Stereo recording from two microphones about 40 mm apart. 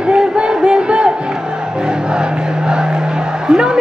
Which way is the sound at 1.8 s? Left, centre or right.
Right.